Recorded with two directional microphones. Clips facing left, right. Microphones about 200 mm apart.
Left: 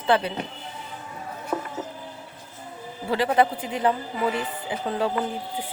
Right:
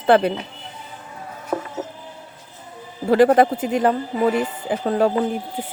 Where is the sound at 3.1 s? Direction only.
50° right (ahead or behind).